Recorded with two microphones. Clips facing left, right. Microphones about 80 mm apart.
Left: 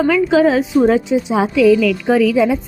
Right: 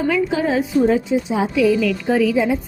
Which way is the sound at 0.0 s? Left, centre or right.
Left.